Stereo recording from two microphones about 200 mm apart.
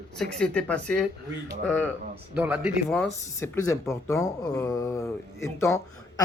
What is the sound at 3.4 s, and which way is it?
Speech, 15° left (ahead or behind).